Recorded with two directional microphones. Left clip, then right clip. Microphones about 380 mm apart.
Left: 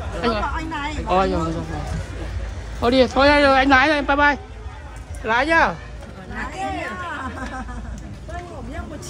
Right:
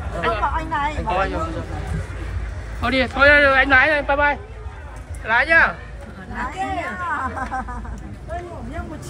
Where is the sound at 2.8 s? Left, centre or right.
Centre.